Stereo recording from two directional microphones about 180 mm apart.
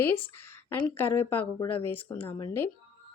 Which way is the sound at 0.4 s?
10° left (ahead or behind).